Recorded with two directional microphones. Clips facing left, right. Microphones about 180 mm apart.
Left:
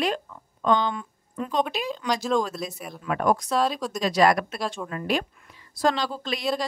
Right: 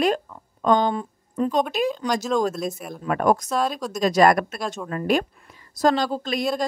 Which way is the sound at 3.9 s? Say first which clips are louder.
Right 4 dB; 45° right (ahead or behind).